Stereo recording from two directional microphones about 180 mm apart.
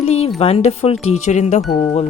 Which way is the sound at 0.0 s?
35° left (ahead or behind).